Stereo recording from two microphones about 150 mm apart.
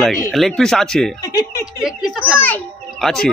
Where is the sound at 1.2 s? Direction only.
25° left (ahead or behind).